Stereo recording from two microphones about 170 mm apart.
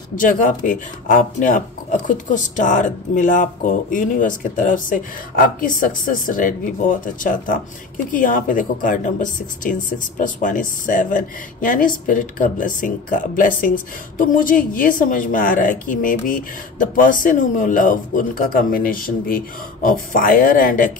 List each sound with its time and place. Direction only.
0.1 s speech: 55° left (ahead or behind)